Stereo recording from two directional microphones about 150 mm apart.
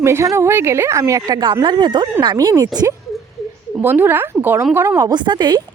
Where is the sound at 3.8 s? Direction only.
15° right (ahead or behind); by 5.6 s 30° right (ahead or behind).